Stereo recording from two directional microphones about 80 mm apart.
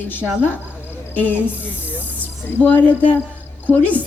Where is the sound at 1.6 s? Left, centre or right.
Left.